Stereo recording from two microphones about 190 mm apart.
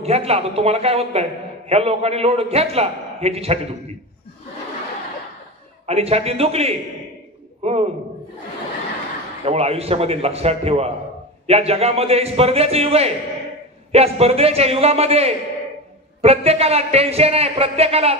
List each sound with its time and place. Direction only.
0.0 s a man's voice: 35° right (ahead or behind)
5.9 s a man's voice: 35° right (ahead or behind)
7.6 s a sound: 35° right (ahead or behind)
9.4 s a man's voice: 35° right (ahead or behind)